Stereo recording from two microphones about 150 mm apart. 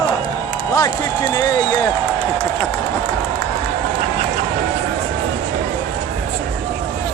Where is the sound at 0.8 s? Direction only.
25° left (ahead or behind).